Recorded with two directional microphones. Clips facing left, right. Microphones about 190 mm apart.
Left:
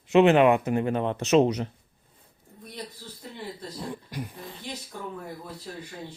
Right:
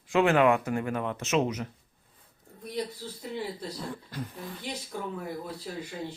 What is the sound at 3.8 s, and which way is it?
Speech, 15° left (ahead or behind).